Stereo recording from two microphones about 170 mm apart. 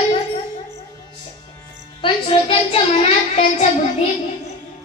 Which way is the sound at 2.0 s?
30° left (ahead or behind).